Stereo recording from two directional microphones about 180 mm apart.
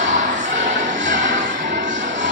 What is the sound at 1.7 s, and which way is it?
Music, 90° right.